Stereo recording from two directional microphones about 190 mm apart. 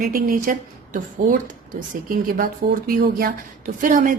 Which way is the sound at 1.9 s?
45° right (ahead or behind).